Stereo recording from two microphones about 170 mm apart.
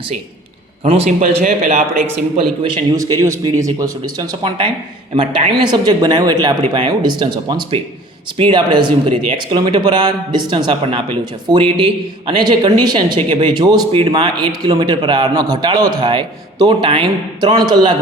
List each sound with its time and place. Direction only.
0.9 s a man's voice: 35° right (ahead or behind)
1.5 s a man's voice: 55° right (ahead or behind)
2.9 s speech: 20° right (ahead or behind)